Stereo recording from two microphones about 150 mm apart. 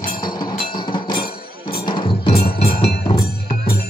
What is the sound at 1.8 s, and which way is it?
Music, 35° left (ahead or behind).